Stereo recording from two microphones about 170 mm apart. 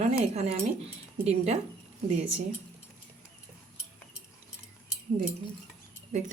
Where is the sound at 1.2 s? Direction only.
40° right (ahead or behind).